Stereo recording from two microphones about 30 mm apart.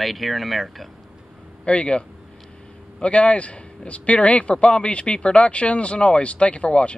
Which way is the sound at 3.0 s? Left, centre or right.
Left.